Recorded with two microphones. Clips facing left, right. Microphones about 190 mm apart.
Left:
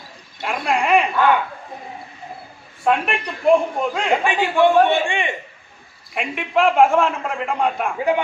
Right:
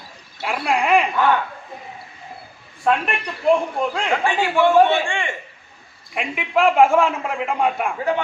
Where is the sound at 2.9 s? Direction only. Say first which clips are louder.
Left 1 dB; centre (ahead or behind).